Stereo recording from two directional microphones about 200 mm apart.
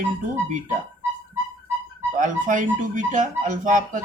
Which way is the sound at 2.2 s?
40° right (ahead or behind).